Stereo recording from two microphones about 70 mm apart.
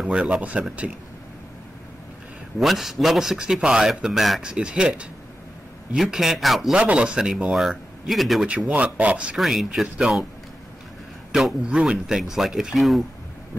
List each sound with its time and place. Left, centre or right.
0.0 s speech: centre
2.6 s speech: centre
6.8 s speech: centre
8.5 s speech: centre
9.4 s speech: centre
11.6 s speech: centre